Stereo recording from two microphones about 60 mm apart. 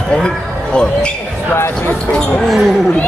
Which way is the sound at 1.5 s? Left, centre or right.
Left.